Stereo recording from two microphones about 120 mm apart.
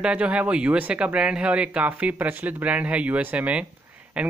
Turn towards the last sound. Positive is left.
turn(degrees=-10)  # may be behind; listen again after turning